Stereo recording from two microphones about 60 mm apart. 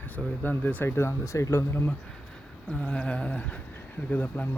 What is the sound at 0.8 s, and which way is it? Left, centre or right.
Speech, left.